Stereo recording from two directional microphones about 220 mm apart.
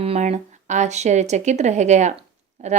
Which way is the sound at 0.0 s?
30° right (ahead or behind).